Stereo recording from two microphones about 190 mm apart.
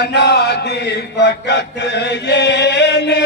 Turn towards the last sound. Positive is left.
turn(degrees=65)  # may be behind; listen again after turning